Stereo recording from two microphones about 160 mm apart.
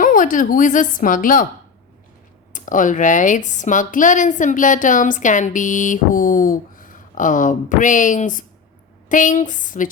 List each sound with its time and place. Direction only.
0.0 s a woman's voice: 55° left (ahead or behind)
2.5 s speech: 55° left (ahead or behind)